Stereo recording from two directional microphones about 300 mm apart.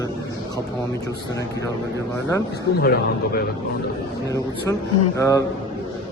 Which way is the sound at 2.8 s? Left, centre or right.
Left.